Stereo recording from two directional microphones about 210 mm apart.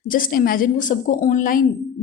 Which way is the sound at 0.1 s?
40° left (ahead or behind).